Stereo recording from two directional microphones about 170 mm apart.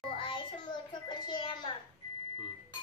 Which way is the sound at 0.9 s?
25° left (ahead or behind).